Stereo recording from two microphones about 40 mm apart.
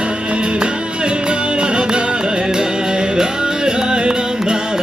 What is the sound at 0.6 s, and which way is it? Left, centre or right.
Music, right.